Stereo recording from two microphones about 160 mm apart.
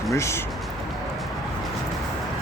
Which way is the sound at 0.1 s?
15° left (ahead or behind).